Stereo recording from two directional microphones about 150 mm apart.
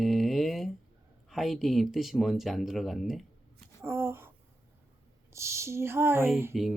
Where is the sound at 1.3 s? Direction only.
Centre (ahead or behind).